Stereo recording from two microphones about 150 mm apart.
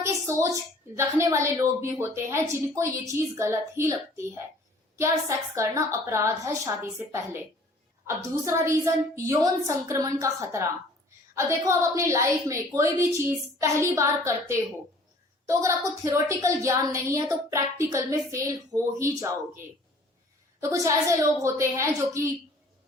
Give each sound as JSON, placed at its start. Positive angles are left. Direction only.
{"t": 0.0, "sound": "a woman's voice", "side_deg": -20}
{"t": 4.9, "sound": "a woman's voice", "side_deg": -20}
{"t": 20.6, "sound": "a woman's voice", "side_deg": -20}